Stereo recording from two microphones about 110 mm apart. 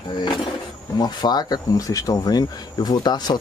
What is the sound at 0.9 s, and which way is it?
Speech, 40° left (ahead or behind).